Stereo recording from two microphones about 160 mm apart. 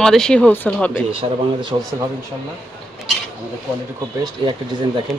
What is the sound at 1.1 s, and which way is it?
Speech, 35° right (ahead or behind).